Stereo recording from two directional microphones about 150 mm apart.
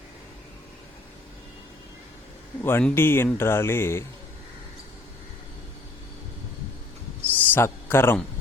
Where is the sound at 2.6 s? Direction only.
10° left (ahead or behind).